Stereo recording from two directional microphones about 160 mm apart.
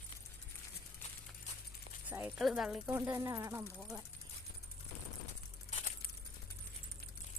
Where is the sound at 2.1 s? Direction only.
10° right (ahead or behind).